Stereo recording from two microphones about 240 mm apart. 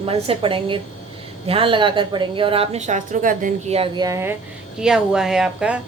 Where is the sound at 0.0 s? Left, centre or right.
Right.